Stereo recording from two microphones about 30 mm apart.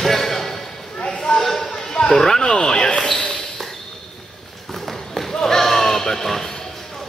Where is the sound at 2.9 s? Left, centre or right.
Centre.